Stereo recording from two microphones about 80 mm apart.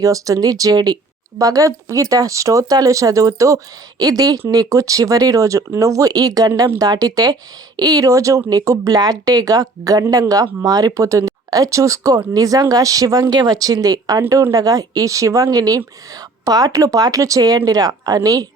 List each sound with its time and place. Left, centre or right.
0.0 s speech: right
14.2 s a woman's voice: right